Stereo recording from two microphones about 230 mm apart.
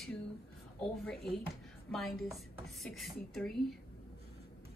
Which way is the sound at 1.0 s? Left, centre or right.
Centre.